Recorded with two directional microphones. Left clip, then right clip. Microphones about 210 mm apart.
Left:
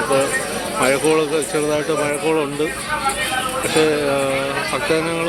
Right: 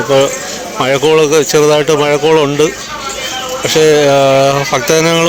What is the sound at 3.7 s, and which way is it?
Speech, 50° right (ahead or behind).